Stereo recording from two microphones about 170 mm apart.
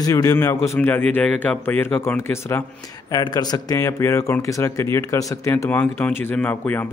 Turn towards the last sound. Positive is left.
turn(degrees=10)  # may be behind; listen again after turning